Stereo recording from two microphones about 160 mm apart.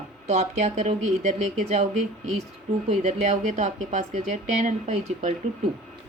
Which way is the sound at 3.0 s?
45° right (ahead or behind).